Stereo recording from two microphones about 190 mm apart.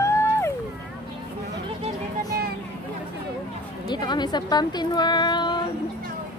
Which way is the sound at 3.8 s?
20° left (ahead or behind).